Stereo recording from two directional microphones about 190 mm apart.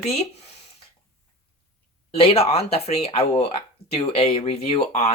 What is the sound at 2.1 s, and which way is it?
Speech, 30° left (ahead or behind).